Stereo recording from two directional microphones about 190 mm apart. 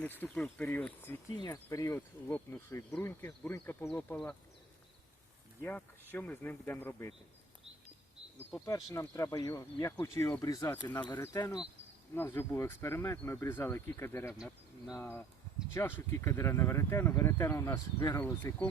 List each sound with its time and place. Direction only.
0.2 s insect: 10° left (ahead or behind)
5.6 s insect: 10° left (ahead or behind)
8.4 s insect: 15° left (ahead or behind)
14.3 s speech: centre (ahead or behind)
14.9 s insect: 10° left (ahead or behind)